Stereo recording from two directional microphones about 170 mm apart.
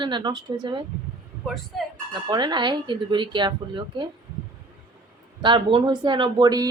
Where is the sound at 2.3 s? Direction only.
25° right (ahead or behind).